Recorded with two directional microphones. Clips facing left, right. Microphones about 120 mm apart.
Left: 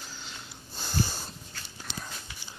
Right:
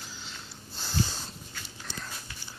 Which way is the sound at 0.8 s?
5° left (ahead or behind).